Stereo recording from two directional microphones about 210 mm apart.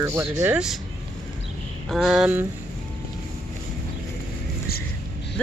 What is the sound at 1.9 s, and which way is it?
Speech, centre (ahead or behind).